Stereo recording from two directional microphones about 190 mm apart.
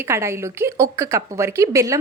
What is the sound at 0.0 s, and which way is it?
A woman's voice, 15° right (ahead or behind).